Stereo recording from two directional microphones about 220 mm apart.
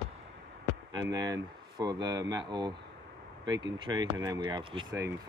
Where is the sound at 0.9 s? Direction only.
15° right (ahead or behind).